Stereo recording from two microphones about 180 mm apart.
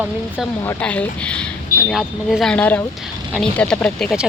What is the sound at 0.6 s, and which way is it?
Speech, 5° left (ahead or behind).